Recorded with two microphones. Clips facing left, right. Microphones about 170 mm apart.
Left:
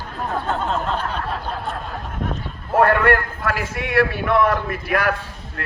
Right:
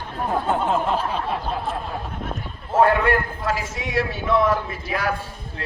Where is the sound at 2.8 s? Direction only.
65° left (ahead or behind).